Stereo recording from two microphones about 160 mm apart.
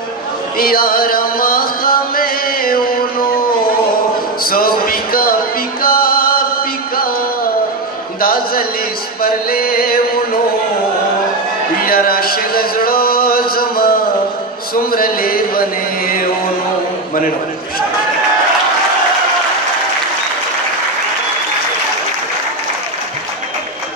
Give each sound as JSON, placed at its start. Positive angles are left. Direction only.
{"t": 0.6, "sound": "music", "side_deg": 65}
{"t": 4.5, "sound": "speech", "side_deg": 65}
{"t": 5.8, "sound": "music", "side_deg": 65}
{"t": 8.2, "sound": "a sound", "side_deg": 65}
{"t": 9.2, "sound": "chant", "side_deg": 70}
{"t": 11.8, "sound": "a sound", "side_deg": 70}
{"t": 14.9, "sound": "speech", "side_deg": 65}